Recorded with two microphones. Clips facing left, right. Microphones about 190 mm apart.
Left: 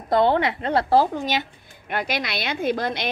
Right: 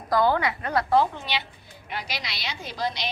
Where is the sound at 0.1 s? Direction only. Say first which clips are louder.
Left 3 dB; 25° left (ahead or behind).